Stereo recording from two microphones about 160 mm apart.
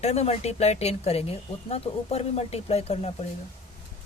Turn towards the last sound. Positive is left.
turn(degrees=40)  # may be behind; listen again after turning